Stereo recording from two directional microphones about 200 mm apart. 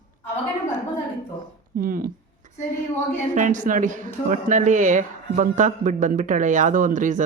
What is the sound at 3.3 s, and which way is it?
Speech, 40° right (ahead or behind).